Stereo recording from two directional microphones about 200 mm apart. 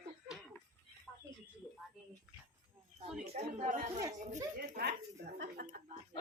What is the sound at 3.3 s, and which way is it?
Speech, 40° right (ahead or behind).